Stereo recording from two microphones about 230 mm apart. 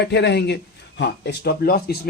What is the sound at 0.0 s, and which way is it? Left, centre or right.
Speech, left.